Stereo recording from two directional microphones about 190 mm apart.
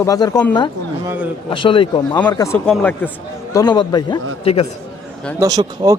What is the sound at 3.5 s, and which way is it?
Speech, 20° left (ahead or behind).